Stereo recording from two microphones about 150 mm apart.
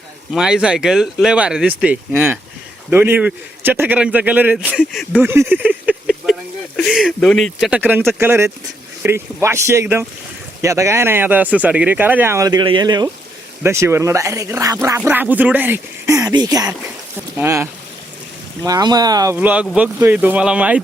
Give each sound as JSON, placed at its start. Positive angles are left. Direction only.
{"t": 0.3, "sound": "speech", "side_deg": -5}
{"t": 5.2, "sound": "a sound", "side_deg": -15}
{"t": 6.7, "sound": "speech", "side_deg": 5}
{"t": 7.7, "sound": "speech", "side_deg": -10}
{"t": 13.6, "sound": "speech", "side_deg": -20}
{"t": 19.4, "sound": "speech", "side_deg": -10}